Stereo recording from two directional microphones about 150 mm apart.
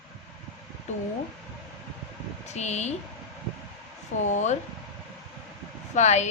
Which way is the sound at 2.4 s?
50° left (ahead or behind).